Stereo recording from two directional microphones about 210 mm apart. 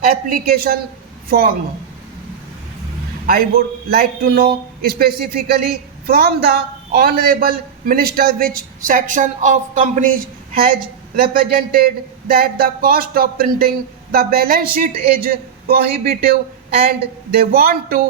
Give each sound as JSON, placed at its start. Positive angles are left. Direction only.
{"t": 0.0, "sound": "a man's voice", "side_deg": -45}
{"t": 3.2, "sound": "a man's voice", "side_deg": -45}
{"t": 11.2, "sound": "a man's voice", "side_deg": -45}